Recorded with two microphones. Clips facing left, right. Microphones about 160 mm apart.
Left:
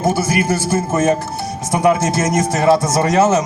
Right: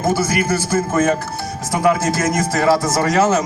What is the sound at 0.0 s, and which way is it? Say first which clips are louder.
A man's voice: left 1 dB; 20° left (ahead or behind).